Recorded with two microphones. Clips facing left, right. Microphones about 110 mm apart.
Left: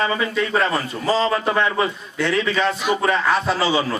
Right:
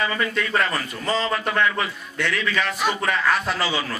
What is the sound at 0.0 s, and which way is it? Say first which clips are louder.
A man's voice: left 3 dB; 25° left (ahead or behind).